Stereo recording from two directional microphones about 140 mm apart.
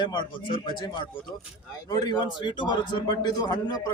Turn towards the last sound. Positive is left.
turn(degrees=30)  # may be behind; listen again after turning